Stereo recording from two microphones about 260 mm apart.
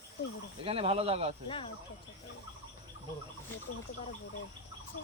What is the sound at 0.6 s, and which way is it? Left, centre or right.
Speech, right.